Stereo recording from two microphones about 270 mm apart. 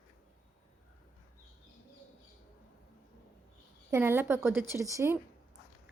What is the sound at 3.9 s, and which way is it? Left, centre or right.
A woman's voice, centre.